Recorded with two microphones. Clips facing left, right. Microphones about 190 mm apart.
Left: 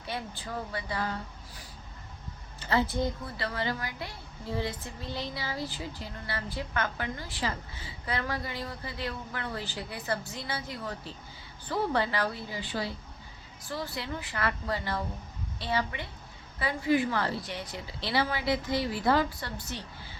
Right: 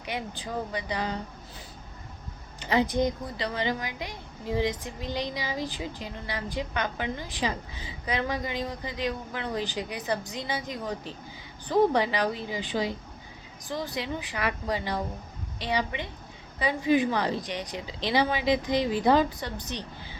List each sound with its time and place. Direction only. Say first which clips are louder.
0.0 s a woman's voice: right 3 dB; 15° right (ahead or behind)
2.6 s a woman's voice: right 4 dB; 15° right (ahead or behind)